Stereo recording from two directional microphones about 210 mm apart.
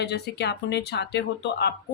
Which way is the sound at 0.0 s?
50° left (ahead or behind).